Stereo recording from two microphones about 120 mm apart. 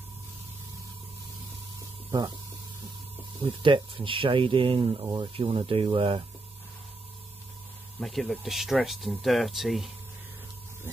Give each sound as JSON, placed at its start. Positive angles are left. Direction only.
{"t": 2.0, "sound": "a sound", "side_deg": -35}
{"t": 3.4, "sound": "speech", "side_deg": -45}
{"t": 8.0, "sound": "speech", "side_deg": 0}